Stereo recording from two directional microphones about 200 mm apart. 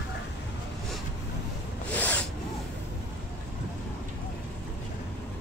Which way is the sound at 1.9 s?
10° left (ahead or behind).